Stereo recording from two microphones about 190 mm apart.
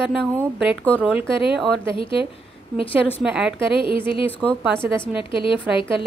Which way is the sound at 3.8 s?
25° left (ahead or behind).